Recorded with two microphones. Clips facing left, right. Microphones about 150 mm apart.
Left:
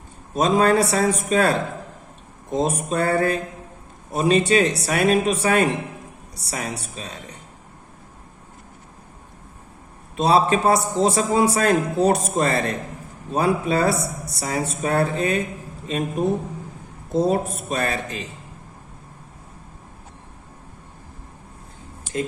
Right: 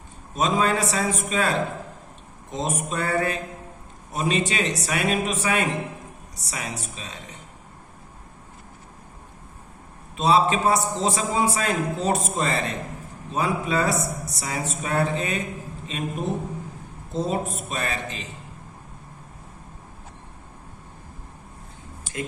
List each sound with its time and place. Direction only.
0.3 s a man's voice: 40° left (ahead or behind)
10.2 s a man's voice: 40° left (ahead or behind)
17.1 s a man's voice: 40° left (ahead or behind)